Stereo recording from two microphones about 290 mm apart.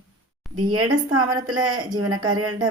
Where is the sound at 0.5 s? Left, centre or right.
Right.